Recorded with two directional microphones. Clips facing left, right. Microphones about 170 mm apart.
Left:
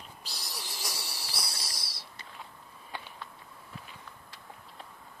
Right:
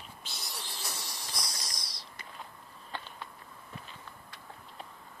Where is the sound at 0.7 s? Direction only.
75° left (ahead or behind).